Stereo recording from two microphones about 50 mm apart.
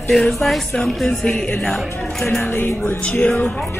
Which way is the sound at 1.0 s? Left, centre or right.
Centre.